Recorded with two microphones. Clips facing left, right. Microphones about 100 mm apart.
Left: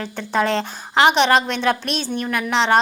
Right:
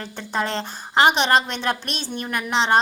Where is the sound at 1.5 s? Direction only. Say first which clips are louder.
Left 5 dB; 50° left (ahead or behind).